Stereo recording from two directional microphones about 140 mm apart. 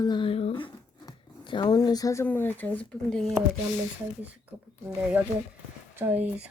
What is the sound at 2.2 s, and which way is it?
Speech, 15° left (ahead or behind).